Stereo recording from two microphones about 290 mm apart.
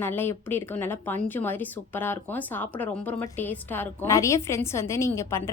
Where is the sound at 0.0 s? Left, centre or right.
Centre.